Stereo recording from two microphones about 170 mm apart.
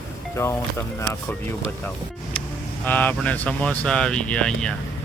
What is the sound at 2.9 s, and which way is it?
Speech, 10° left (ahead or behind).